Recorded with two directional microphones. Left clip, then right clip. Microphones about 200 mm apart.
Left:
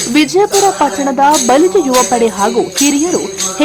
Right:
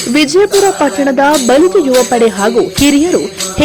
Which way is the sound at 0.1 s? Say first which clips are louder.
Right 2 dB; 10° right (ahead or behind).